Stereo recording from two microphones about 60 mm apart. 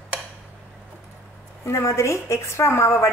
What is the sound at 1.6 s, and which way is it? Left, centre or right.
A woman's voice, left.